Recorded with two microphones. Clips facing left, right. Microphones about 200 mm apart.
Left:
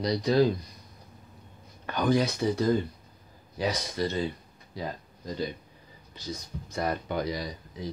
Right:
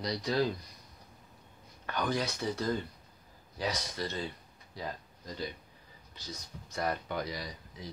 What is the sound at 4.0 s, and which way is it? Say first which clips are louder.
Speech: left 9 dB; 10° left (ahead or behind).